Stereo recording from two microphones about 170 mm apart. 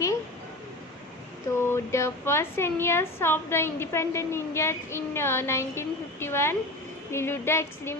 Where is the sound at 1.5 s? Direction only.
15° left (ahead or behind).